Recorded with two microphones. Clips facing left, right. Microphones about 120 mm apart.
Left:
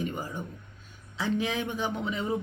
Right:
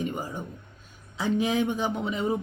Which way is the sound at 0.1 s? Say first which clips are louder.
Right 2 dB; 15° right (ahead or behind).